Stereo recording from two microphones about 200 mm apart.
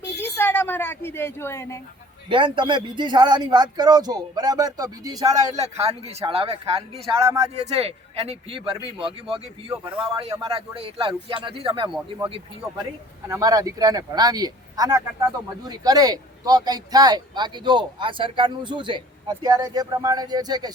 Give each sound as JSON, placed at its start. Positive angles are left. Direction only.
{"t": 0.2, "sound": "a sound", "side_deg": 10}
{"t": 2.3, "sound": "speech", "side_deg": -25}
{"t": 5.8, "sound": "speech", "side_deg": -30}
{"t": 7.1, "sound": "speech", "side_deg": -15}
{"t": 7.5, "sound": "speech", "side_deg": -30}